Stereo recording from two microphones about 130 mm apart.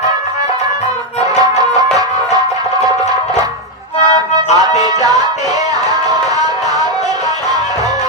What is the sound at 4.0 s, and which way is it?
Music, 60° left (ahead or behind).